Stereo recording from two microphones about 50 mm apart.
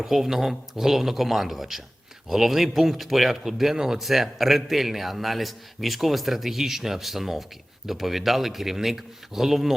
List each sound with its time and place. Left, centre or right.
0.0 s speech: centre